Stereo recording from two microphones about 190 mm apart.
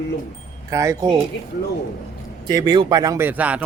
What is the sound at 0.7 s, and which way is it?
Speech, 15° right (ahead or behind).